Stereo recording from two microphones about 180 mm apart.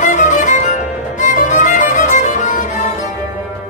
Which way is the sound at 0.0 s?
45° left (ahead or behind).